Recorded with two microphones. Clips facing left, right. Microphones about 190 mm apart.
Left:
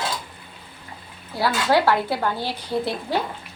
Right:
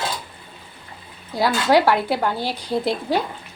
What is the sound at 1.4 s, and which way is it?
Speech, 15° right (ahead or behind).